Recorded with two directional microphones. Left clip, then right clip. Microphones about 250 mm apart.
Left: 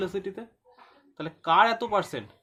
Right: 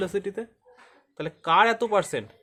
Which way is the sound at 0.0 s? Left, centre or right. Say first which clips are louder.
Right 3 dB; right.